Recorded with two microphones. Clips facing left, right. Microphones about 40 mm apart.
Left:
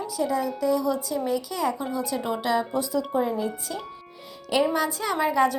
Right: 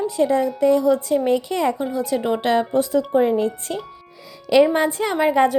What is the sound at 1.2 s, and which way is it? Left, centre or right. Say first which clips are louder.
Speech: right 6 dB; right.